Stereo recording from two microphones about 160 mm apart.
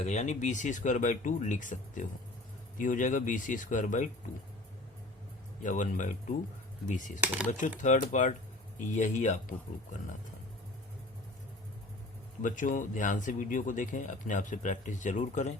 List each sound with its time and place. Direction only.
0.0 s speech: 45° left (ahead or behind)
5.6 s speech: 50° left (ahead or behind)
7.2 s speech: 10° right (ahead or behind)
7.8 s speech: 50° left (ahead or behind)
12.4 s speech: 55° left (ahead or behind)